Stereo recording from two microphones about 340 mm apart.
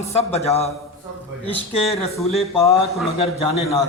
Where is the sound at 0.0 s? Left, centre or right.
Centre.